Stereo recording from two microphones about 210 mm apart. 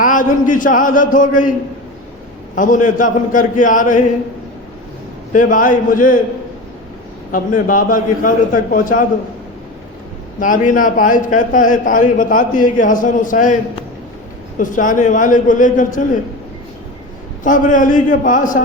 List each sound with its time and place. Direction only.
0.0 s a man's voice: 40° left (ahead or behind)
2.6 s a man's voice: 40° left (ahead or behind)
5.3 s a man's voice: 40° left (ahead or behind)
7.3 s a man's voice: 40° left (ahead or behind)
10.4 s a man's voice: 40° left (ahead or behind)
14.6 s a man's voice: 40° left (ahead or behind)
17.4 s a man's voice: 40° left (ahead or behind)